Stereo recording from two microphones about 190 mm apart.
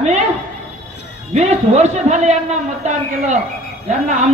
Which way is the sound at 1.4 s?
35° right (ahead or behind).